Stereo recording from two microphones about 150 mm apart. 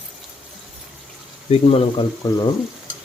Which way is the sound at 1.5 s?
40° left (ahead or behind).